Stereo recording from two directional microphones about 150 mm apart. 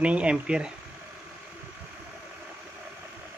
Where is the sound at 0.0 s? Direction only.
5° right (ahead or behind).